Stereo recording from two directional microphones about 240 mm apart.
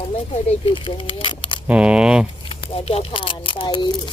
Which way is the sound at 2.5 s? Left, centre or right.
Left.